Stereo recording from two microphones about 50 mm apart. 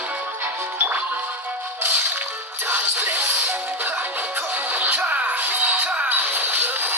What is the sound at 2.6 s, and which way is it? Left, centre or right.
Music, right.